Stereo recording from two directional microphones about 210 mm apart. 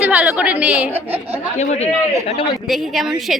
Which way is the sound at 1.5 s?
30° left (ahead or behind).